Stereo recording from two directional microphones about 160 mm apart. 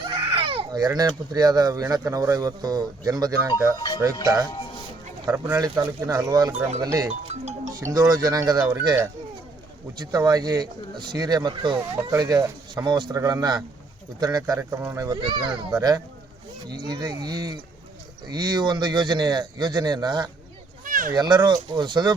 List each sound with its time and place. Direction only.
0.0 s speech: 30° right (ahead or behind)
7.1 s speech: 45° right (ahead or behind)
7.9 s speech: 25° right (ahead or behind)
10.0 s speech: 25° right (ahead or behind)
16.9 s speech: 25° right (ahead or behind)
20.8 s a sound: 55° right (ahead or behind)
21.2 s speech: 25° right (ahead or behind)